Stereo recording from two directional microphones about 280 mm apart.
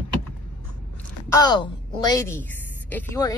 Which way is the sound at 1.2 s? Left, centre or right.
Centre.